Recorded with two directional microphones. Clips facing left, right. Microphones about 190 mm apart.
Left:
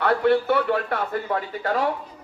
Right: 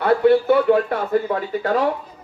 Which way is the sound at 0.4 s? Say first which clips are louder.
Right 6 dB; 40° right (ahead or behind).